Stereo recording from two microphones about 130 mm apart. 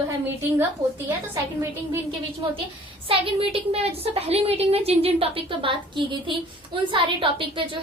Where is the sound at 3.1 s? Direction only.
45° right (ahead or behind).